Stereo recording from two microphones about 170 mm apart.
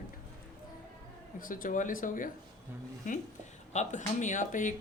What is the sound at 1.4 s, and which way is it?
Speech, 55° left (ahead or behind).